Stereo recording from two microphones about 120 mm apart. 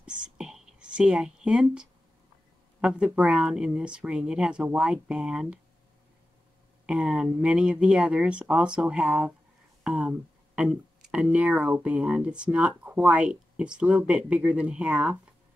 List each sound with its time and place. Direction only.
0.2 s speech: 5° right (ahead or behind)
6.9 s speech: 5° right (ahead or behind)